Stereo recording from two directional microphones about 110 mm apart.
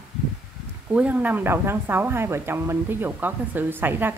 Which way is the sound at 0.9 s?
15° right (ahead or behind).